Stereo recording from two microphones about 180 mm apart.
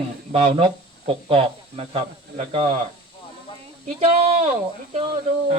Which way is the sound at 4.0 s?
35° right (ahead or behind).